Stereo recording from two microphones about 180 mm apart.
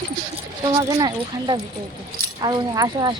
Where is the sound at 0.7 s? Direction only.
25° right (ahead or behind).